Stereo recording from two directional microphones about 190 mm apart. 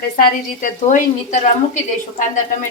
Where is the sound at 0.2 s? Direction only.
45° left (ahead or behind).